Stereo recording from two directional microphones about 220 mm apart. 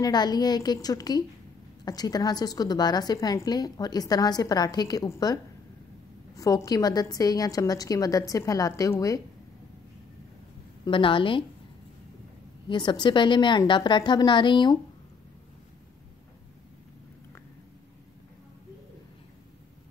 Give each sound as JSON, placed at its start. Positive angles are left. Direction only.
{"t": 0.0, "sound": "a woman's voice", "side_deg": 20}
{"t": 10.9, "sound": "a woman's voice", "side_deg": 25}
{"t": 12.6, "sound": "a woman's voice", "side_deg": 20}